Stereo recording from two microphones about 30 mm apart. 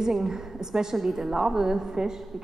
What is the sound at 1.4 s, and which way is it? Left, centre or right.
Speech, centre.